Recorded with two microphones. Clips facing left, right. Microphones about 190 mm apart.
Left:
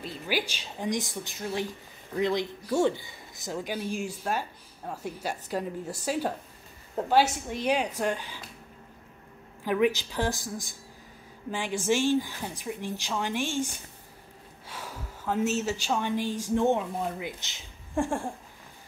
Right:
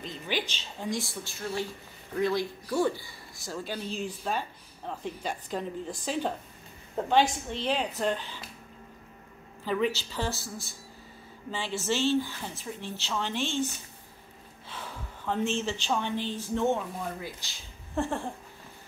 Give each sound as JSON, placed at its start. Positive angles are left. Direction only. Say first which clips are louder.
{"t": 0.0, "sound": "speech", "louder": "left 2 dB", "side_deg": 10}
{"t": 9.7, "sound": "speech", "louder": "left 3 dB", "side_deg": 15}
{"t": 14.7, "sound": "a sound", "louder": "left 1 dB", "side_deg": 10}
{"t": 15.5, "sound": "speech", "louder": "left 1 dB", "side_deg": 10}